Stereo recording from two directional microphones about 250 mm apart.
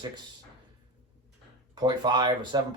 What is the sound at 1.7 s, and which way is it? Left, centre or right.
Speech, centre.